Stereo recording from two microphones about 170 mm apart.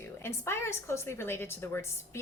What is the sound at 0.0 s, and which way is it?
A woman's voice, 15° left (ahead or behind).